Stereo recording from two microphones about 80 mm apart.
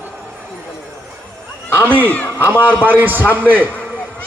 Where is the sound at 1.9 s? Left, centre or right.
Right.